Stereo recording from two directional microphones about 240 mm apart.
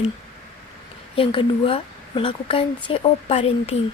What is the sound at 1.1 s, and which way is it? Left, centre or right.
A woman's voice, left.